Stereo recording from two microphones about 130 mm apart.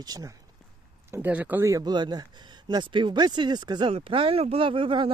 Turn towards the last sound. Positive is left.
turn(degrees=-40)  # may be behind; listen again after turning